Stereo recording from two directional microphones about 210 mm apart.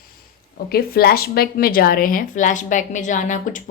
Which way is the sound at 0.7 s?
45° left (ahead or behind).